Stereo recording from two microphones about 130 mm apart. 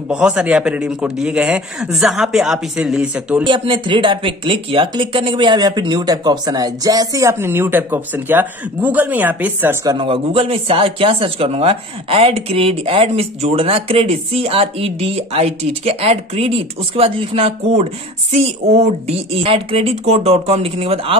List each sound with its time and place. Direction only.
0.1 s a man's voice: 10° right (ahead or behind)
3.4 s speech: 40° right (ahead or behind); by 9.8 s 15° right (ahead or behind)
9.8 s speech: 40° right (ahead or behind)